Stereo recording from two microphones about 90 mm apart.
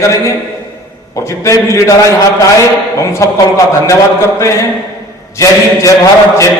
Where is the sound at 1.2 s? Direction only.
35° left (ahead or behind).